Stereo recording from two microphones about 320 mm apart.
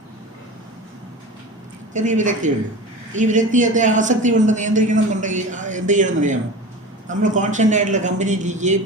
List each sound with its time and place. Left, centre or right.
1.9 s a man's voice: right